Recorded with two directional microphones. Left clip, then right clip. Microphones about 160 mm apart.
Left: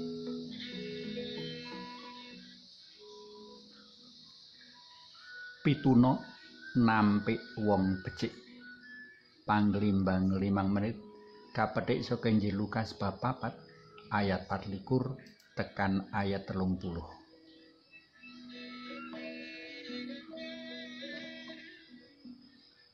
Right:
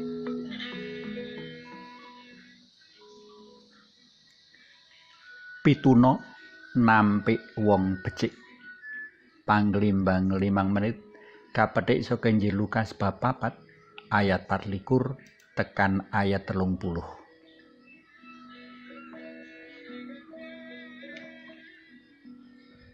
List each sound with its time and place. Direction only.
0.2 s music: 30° right (ahead or behind); by 1.6 s 10° right (ahead or behind)
1.6 s music: 5° left (ahead or behind)
5.6 s speech: 20° right (ahead or behind)
7.2 s speech: 20° right (ahead or behind)
9.5 s speech: 20° right (ahead or behind)
18.5 s music: 10° left (ahead or behind)